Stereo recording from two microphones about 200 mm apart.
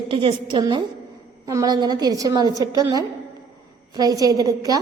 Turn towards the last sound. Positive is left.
turn(degrees=-15)  # may be behind; listen again after turning